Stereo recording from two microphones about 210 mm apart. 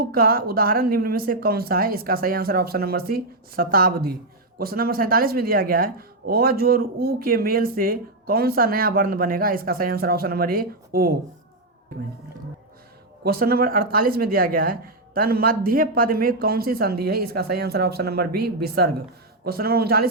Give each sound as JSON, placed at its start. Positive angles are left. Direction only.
{"t": 0.0, "sound": "speech", "side_deg": -45}
{"t": 13.2, "sound": "speech", "side_deg": -45}